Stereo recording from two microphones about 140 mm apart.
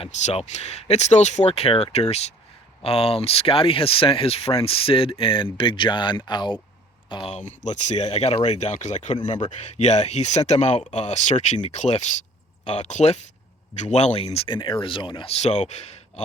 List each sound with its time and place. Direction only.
0.0 s speech: 50° left (ahead or behind); by 6.6 s 35° left (ahead or behind)
7.3 s speech: 55° left (ahead or behind)
14.3 s speech: 35° left (ahead or behind)